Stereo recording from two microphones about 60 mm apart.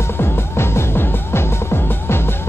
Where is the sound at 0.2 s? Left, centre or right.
Left.